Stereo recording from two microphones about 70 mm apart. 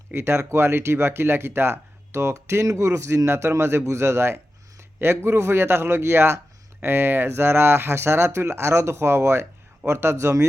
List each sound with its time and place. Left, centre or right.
0.1 s speech: right